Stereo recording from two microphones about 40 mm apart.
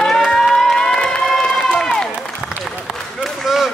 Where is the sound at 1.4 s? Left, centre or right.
Left.